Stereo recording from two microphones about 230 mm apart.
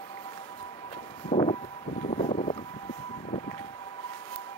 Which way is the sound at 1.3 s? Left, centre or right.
Left.